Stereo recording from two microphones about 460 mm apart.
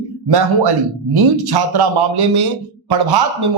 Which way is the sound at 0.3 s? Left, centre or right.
Right.